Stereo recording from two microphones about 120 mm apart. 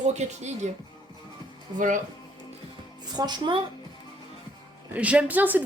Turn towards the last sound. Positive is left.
turn(degrees=-15)  # may be behind; listen again after turning